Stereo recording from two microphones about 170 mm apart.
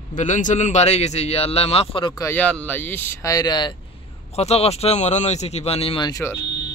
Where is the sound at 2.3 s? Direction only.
10° left (ahead or behind); by 3.7 s 25° left (ahead or behind).